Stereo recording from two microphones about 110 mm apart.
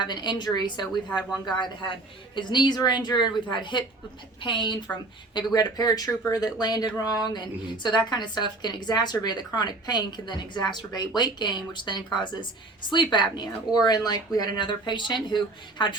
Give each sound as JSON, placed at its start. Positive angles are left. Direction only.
{"t": 0.0, "sound": "speech", "side_deg": 45}